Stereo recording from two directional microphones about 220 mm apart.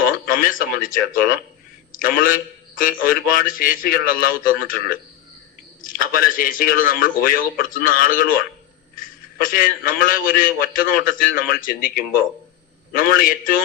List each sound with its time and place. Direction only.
0.6 s a man's voice: 40° left (ahead or behind)